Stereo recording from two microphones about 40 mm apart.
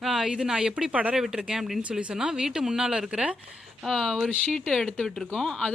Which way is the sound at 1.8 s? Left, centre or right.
Right.